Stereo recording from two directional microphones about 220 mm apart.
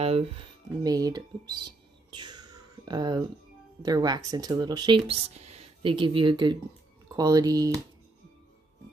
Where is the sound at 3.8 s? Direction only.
15° right (ahead or behind).